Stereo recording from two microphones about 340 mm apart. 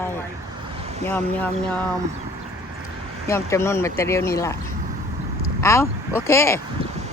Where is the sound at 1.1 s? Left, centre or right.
Centre.